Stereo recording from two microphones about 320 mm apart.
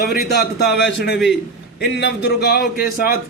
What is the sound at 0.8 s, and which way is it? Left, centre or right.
A man's voice, left.